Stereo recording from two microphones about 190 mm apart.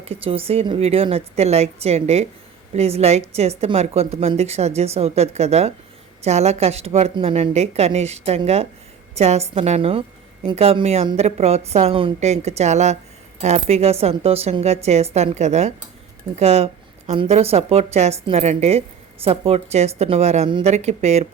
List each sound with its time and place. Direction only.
0.0 s a woman's voice: 30° right (ahead or behind)